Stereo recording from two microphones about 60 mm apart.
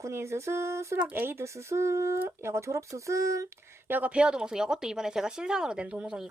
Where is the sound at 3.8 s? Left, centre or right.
Right.